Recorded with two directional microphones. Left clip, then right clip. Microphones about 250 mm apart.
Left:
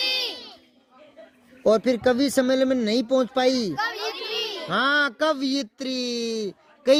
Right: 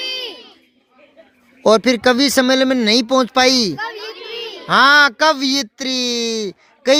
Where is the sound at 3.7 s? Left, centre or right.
Centre.